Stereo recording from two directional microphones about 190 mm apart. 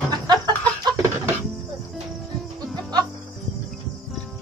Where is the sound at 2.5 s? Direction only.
20° right (ahead or behind).